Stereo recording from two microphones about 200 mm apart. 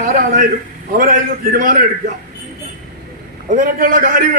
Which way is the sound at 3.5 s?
40° right (ahead or behind).